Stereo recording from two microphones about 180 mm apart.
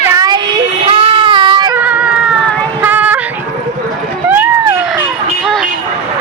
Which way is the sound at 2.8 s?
10° right (ahead or behind).